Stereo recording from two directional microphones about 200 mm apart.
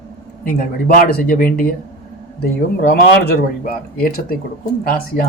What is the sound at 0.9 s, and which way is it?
Speech, 50° left (ahead or behind).